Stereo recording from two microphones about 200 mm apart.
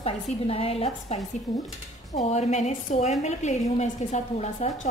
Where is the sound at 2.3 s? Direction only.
35° left (ahead or behind).